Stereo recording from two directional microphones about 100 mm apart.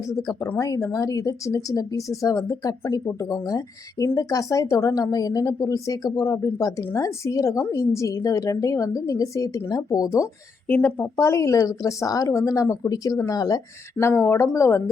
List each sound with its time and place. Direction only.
0.1 s speech: 40° left (ahead or behind)
10.7 s speech: 20° left (ahead or behind); by 13.6 s 35° left (ahead or behind)
14.0 s speech: 25° left (ahead or behind)